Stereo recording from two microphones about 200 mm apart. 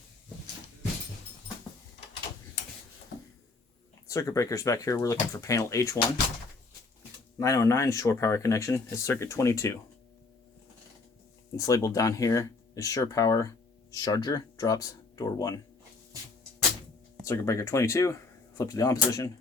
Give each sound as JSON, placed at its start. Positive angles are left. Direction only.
{"t": 4.1, "sound": "speech", "side_deg": 15}
{"t": 7.3, "sound": "speech", "side_deg": 15}
{"t": 11.5, "sound": "speech", "side_deg": 15}
{"t": 17.2, "sound": "speech", "side_deg": 15}